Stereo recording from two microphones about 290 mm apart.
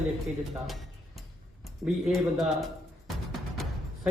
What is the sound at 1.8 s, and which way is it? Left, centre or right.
Speech, centre.